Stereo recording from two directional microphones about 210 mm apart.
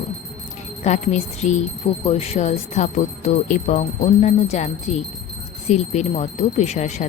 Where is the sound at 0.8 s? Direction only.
35° left (ahead or behind).